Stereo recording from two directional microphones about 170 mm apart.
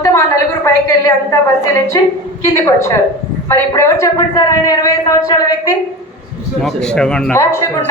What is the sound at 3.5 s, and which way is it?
A man's voice, 15° left (ahead or behind).